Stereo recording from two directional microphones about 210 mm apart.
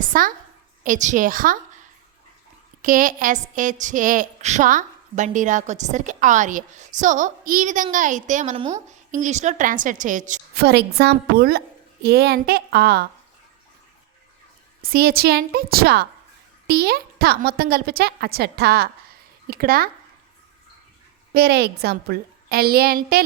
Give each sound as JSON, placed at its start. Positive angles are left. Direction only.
{"t": 0.0, "sound": "a woman's voice", "side_deg": -40}
{"t": 2.8, "sound": "a woman's voice", "side_deg": -40}
{"t": 14.8, "sound": "a woman's voice", "side_deg": -45}
{"t": 21.3, "sound": "a woman's voice", "side_deg": -50}